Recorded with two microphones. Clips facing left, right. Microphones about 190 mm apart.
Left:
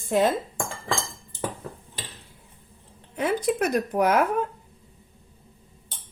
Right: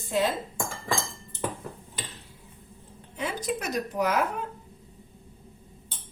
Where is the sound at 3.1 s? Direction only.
55° left (ahead or behind).